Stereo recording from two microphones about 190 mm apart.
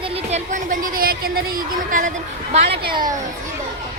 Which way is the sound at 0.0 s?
35° right (ahead or behind).